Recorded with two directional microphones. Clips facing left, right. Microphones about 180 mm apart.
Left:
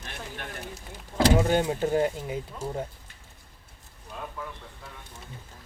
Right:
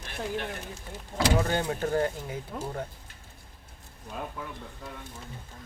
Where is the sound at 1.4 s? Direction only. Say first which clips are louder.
Left 4 dB; 15° left (ahead or behind).